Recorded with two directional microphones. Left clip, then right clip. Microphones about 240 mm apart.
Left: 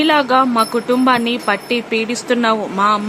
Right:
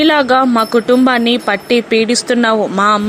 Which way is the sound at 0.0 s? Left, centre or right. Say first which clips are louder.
Right 3 dB; right.